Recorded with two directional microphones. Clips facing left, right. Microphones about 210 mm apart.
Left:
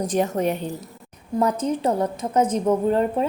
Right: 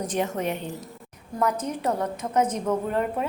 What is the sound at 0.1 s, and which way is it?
A woman's voice, 35° left (ahead or behind).